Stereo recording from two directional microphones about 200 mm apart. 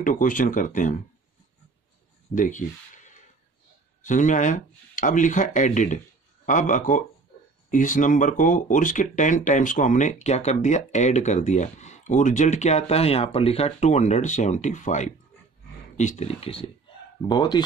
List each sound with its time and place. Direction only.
0.0 s speech: 40° left (ahead or behind)
2.3 s speech: 40° left (ahead or behind); by 17.6 s 20° left (ahead or behind)